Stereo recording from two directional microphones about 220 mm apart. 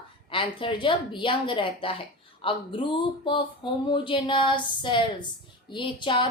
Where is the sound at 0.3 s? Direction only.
25° left (ahead or behind).